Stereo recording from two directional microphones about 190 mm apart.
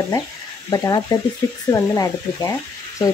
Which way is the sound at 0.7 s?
20° left (ahead or behind).